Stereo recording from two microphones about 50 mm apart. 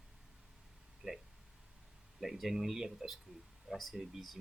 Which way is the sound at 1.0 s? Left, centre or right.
Right.